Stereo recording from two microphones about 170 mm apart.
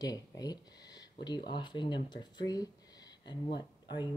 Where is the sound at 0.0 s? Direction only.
20° left (ahead or behind).